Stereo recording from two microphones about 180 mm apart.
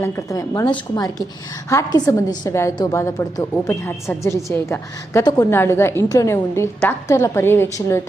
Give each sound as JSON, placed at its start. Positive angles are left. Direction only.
{"t": 0.0, "sound": "a woman's voice", "side_deg": 15}